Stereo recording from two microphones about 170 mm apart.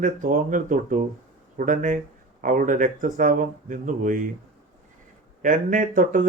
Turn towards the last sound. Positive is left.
turn(degrees=-50)  # may be behind; listen again after turning